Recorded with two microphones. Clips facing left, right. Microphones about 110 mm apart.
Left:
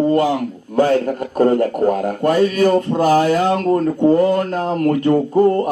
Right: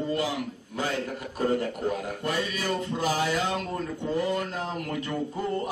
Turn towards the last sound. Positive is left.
turn(degrees=65)  # may be behind; listen again after turning